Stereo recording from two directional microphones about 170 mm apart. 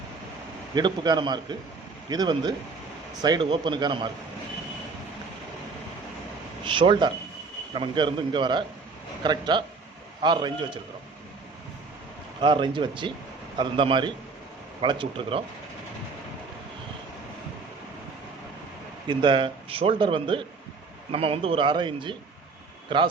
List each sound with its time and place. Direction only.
0.7 s speech: 25° right (ahead or behind)
6.7 s speech: 30° right (ahead or behind)
12.4 s a man's voice: 30° right (ahead or behind)
19.0 s a man's voice: 30° right (ahead or behind)